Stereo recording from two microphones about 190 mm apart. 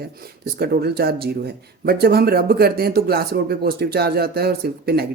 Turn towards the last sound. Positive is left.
turn(degrees=-55)  # may be behind; listen again after turning